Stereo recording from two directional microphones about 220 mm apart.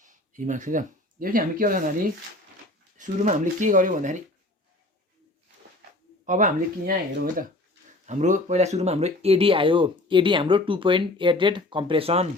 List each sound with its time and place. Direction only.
0.0 s speech: 35° right (ahead or behind)
3.0 s speech: 35° right (ahead or behind)
6.2 s speech: 35° right (ahead or behind)
8.0 s speech: 35° right (ahead or behind)